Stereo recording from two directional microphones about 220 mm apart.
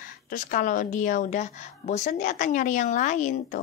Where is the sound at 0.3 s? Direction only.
35° left (ahead or behind).